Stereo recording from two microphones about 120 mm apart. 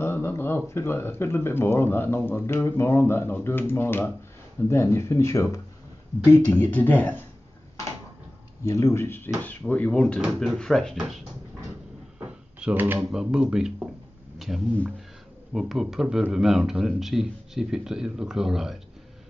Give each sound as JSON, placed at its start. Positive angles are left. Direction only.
{"t": 0.0, "sound": "speech", "side_deg": 20}
{"t": 8.6, "sound": "speech", "side_deg": 25}
{"t": 12.5, "sound": "speech", "side_deg": -10}
{"t": 13.1, "sound": "speech", "side_deg": -5}